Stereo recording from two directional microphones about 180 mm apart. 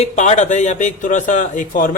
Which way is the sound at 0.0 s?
40° left (ahead or behind).